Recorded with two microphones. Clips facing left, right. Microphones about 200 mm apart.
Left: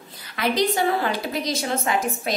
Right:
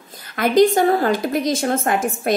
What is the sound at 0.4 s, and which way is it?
A woman's voice, 50° right (ahead or behind).